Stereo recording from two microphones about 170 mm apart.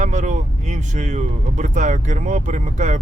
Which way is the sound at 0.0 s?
45° right (ahead or behind).